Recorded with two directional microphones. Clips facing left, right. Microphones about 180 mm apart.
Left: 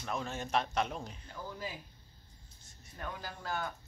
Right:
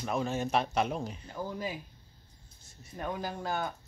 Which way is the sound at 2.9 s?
20° right (ahead or behind).